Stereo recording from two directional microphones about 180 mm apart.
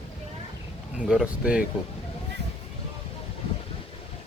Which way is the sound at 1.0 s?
5° right (ahead or behind).